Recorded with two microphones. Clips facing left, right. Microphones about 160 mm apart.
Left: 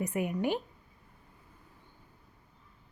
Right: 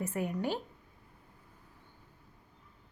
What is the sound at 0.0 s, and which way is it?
Speech, 15° left (ahead or behind).